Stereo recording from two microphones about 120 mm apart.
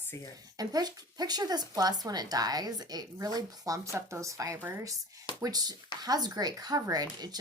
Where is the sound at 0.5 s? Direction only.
30° right (ahead or behind).